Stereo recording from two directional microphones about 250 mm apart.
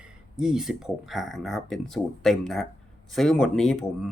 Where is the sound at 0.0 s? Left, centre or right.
Centre.